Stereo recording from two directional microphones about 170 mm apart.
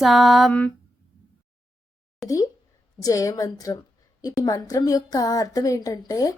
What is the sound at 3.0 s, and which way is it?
A woman's voice, 20° left (ahead or behind).